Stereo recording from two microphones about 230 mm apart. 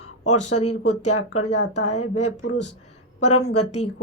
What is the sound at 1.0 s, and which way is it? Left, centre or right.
Speech, left.